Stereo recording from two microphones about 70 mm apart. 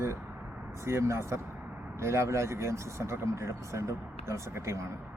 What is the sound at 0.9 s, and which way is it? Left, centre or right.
Speech, right.